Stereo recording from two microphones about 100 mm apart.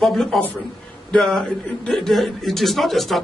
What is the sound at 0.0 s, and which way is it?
A man's voice, centre (ahead or behind).